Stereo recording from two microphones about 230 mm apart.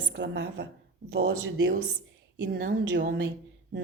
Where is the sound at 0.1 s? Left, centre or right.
Right.